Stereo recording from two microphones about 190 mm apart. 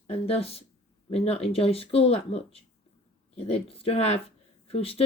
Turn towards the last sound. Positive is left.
turn(degrees=30)  # may be behind; listen again after turning